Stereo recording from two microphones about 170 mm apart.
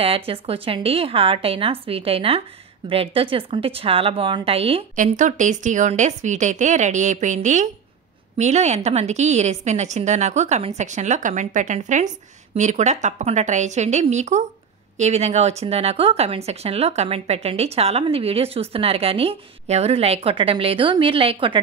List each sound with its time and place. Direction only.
0.3 s speech: 35° right (ahead or behind)
4.9 s a woman's voice: 45° right (ahead or behind); by 21.5 s 30° right (ahead or behind)